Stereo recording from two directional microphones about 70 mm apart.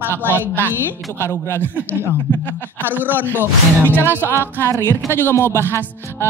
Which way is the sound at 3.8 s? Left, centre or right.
Left.